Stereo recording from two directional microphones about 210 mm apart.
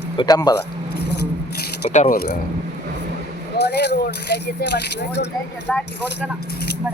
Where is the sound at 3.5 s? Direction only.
55° left (ahead or behind).